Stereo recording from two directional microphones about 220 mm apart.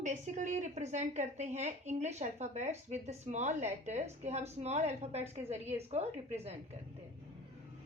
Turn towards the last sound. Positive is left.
turn(degrees=-30)  # may be behind; listen again after turning